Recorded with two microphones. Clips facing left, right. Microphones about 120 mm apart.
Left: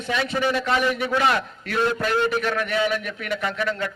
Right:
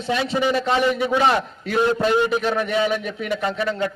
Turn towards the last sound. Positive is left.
turn(degrees=-25)  # may be behind; listen again after turning